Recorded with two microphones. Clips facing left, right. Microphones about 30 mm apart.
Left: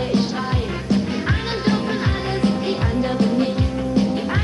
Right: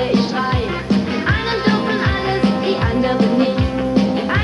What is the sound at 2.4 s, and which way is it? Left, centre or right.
Music, right.